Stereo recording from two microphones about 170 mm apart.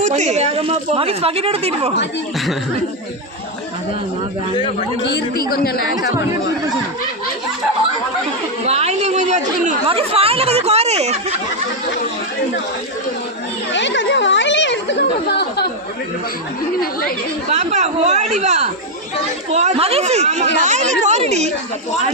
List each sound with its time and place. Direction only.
0.0 s speech: 45° right (ahead or behind)
5.0 s a woman's voice: 70° left (ahead or behind)
8.6 s speech: 40° right (ahead or behind)
9.8 s speech: 35° right (ahead or behind)
13.7 s a sound: 90° left
17.5 s speech: 40° right (ahead or behind)